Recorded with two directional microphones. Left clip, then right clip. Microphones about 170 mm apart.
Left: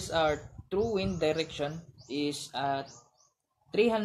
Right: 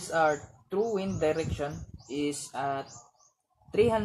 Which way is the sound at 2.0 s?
30° right (ahead or behind).